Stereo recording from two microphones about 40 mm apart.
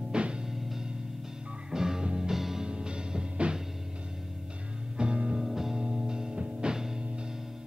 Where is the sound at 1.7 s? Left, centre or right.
Centre.